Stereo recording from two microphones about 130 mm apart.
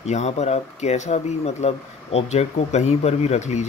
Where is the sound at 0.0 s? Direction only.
60° left (ahead or behind).